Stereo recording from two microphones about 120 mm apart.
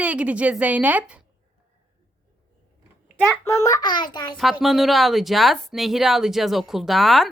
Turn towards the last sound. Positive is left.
turn(degrees=0)  # may be behind; listen again after turning